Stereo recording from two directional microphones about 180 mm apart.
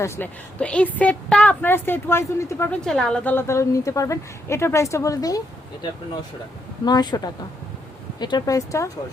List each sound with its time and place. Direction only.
0.0 s a woman's voice: 15° left (ahead or behind)
2.8 s a woman's voice: 5° left (ahead or behind); by 5.4 s 20° left (ahead or behind)
6.8 s speech: 25° left (ahead or behind)
8.2 s speech: 25° left (ahead or behind)